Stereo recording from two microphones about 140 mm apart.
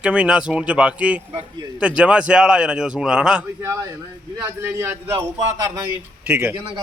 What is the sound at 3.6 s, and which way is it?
A man's voice, 20° right (ahead or behind).